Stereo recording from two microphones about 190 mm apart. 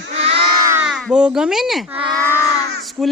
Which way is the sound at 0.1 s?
30° right (ahead or behind).